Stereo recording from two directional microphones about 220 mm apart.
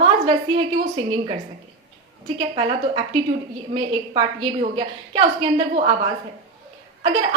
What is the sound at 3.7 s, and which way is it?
A woman's voice, 20° right (ahead or behind).